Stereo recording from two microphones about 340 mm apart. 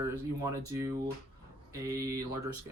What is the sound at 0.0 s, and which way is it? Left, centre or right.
Speech, centre.